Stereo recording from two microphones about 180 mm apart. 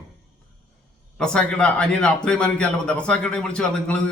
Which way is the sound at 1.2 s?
5° left (ahead or behind).